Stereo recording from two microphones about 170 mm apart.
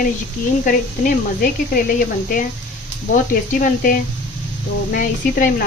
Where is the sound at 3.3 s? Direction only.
55° left (ahead or behind).